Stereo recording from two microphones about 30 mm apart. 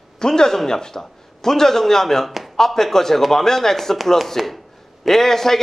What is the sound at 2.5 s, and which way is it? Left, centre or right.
Speech, centre.